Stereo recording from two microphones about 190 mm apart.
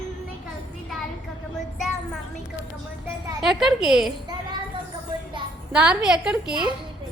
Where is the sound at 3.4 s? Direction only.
Centre (ahead or behind).